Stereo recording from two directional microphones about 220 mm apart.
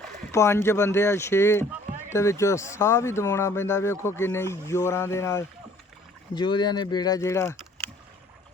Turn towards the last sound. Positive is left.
turn(degrees=10)  # may be behind; listen again after turning